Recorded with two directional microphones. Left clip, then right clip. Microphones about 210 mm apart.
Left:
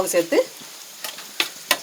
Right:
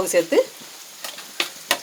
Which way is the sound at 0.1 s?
10° right (ahead or behind).